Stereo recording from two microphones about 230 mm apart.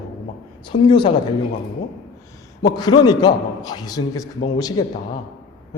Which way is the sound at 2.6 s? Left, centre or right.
Centre.